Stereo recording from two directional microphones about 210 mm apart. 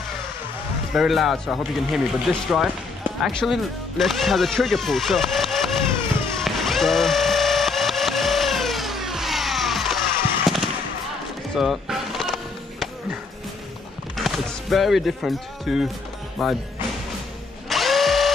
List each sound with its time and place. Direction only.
0.9 s speech: centre (ahead or behind)
6.4 s vehicle: centre (ahead or behind)
10.5 s fireworks: centre (ahead or behind)
11.5 s music: centre (ahead or behind)
14.1 s speech: centre (ahead or behind)
17.6 s drill: centre (ahead or behind)